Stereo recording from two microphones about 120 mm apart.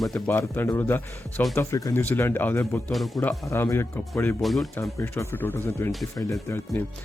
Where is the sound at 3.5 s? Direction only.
20° left (ahead or behind).